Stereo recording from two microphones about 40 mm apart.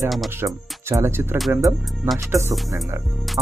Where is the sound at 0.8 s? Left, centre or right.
Right.